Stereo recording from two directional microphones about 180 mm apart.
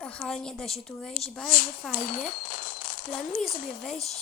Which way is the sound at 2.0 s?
55° left (ahead or behind).